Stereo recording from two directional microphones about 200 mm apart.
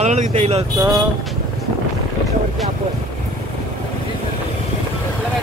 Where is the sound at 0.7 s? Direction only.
20° right (ahead or behind).